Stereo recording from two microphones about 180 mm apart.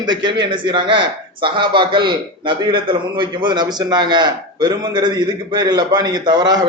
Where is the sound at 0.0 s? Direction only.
25° right (ahead or behind).